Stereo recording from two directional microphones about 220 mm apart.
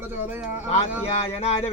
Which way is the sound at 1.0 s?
30° left (ahead or behind).